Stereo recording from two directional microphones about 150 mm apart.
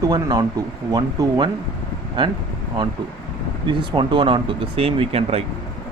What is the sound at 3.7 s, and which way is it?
Speech, 35° right (ahead or behind).